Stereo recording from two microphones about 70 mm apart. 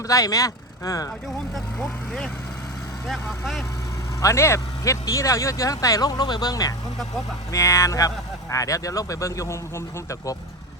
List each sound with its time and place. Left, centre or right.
0.1 s speech: left
1.5 s speech: centre
4.2 s speech: left
7.5 s speech: left